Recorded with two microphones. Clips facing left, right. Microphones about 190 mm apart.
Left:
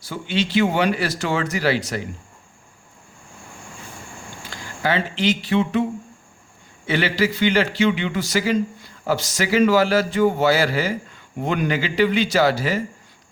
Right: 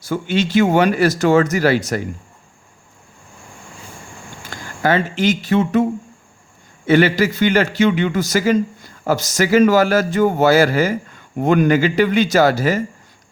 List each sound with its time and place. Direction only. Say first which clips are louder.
0.0 s a man's voice: right 5 dB; 45° right (ahead or behind)
4.4 s a man's voice: right 5 dB; 50° right (ahead or behind)